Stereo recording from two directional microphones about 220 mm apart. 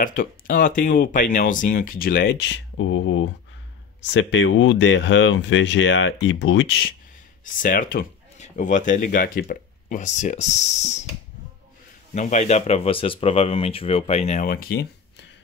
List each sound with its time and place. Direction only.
0.0 s speech: 40° left (ahead or behind); by 6.9 s 55° left (ahead or behind)
7.6 s speech: 40° left (ahead or behind)
12.1 s speech: 35° left (ahead or behind); by 15.2 s 50° left (ahead or behind)